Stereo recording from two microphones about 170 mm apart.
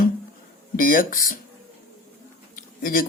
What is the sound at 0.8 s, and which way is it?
Speech, 55° left (ahead or behind).